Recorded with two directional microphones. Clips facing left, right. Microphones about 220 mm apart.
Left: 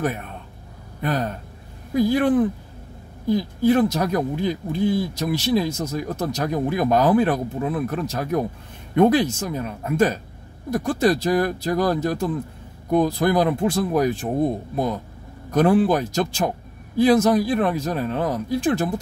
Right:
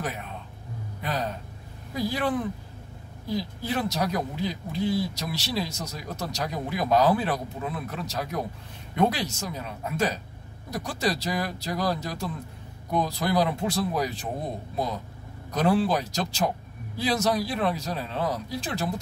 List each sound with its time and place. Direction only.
0.0 s speech: 55° left (ahead or behind)
15.5 s speech: 50° left (ahead or behind)